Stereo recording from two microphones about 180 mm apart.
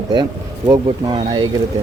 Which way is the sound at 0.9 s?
25° right (ahead or behind).